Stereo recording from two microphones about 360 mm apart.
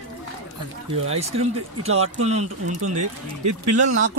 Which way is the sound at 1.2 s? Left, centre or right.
Centre.